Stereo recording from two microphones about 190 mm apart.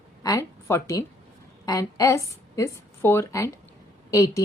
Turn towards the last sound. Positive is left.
turn(degrees=15)  # may be behind; listen again after turning